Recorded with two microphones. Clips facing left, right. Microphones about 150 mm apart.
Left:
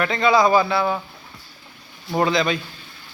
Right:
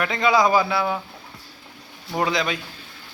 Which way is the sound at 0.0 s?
10° right (ahead or behind).